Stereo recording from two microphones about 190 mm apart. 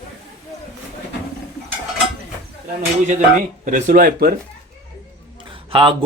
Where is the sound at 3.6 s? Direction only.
45° right (ahead or behind).